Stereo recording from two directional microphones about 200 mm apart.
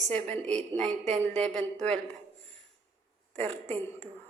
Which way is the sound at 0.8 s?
35° right (ahead or behind).